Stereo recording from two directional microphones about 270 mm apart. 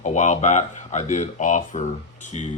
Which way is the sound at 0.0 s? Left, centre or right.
Left.